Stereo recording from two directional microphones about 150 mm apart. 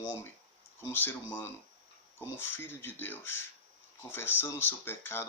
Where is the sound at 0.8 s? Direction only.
15° left (ahead or behind).